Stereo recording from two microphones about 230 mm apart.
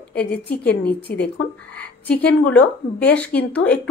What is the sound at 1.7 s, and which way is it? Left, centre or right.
A woman's voice, centre.